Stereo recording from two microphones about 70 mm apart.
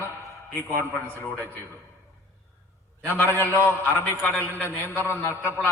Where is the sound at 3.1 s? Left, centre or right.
Left.